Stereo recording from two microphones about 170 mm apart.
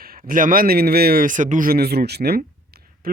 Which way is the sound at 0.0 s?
60° right (ahead or behind).